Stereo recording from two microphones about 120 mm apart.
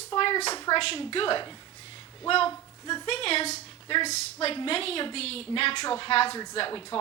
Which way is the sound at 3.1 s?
55° left (ahead or behind).